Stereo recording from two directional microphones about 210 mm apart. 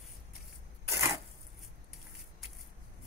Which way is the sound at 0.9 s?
15° right (ahead or behind).